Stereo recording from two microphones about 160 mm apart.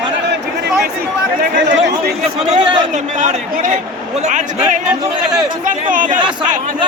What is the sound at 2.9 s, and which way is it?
A man's voice, 55° right (ahead or behind).